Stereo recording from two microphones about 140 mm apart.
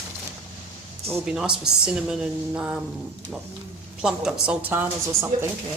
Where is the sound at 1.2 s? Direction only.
5° right (ahead or behind).